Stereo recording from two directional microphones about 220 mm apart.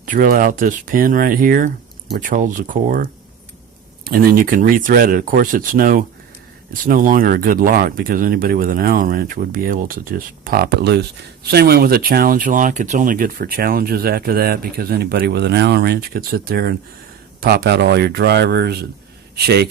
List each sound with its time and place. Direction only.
0.0 s speech: 35° right (ahead or behind)